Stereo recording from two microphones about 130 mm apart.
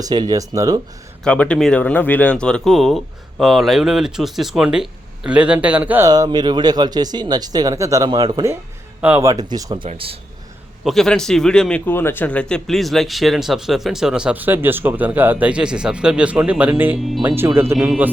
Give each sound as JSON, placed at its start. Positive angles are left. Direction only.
{"t": 0.0, "sound": "speech", "side_deg": -30}
{"t": 1.2, "sound": "speech", "side_deg": 10}
{"t": 6.1, "sound": "speech", "side_deg": -30}
{"t": 9.0, "sound": "a man's voice", "side_deg": -10}
{"t": 9.2, "sound": "speech", "side_deg": -30}
{"t": 9.8, "sound": "speech", "side_deg": -45}
{"t": 10.8, "sound": "speech", "side_deg": 5}
{"t": 11.9, "sound": "speech", "side_deg": 15}
{"t": 17.7, "sound": "speech", "side_deg": -5}